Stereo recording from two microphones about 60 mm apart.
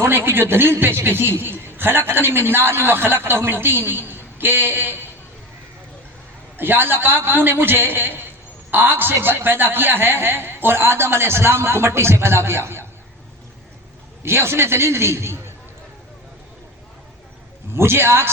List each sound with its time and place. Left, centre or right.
0.0 s a man's voice: right
6.6 s a man's voice: right
14.2 s a man's voice: right
17.7 s a man's voice: right